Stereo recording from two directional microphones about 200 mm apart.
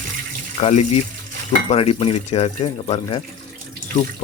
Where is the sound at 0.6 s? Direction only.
30° left (ahead or behind).